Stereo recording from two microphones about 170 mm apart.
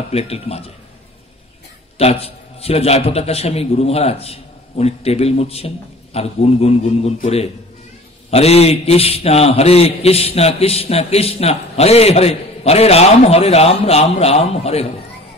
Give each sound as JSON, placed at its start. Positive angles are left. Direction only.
{"t": 0.1, "sound": "a man's voice", "side_deg": 35}
{"t": 2.0, "sound": "a man's voice", "side_deg": 35}
{"t": 8.3, "sound": "a man's voice", "side_deg": 35}